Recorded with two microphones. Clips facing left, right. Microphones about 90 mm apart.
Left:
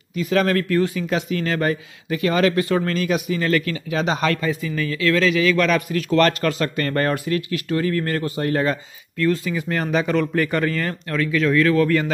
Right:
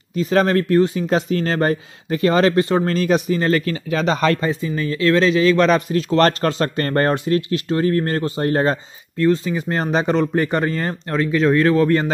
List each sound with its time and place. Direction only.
0.1 s speech: 35° right (ahead or behind)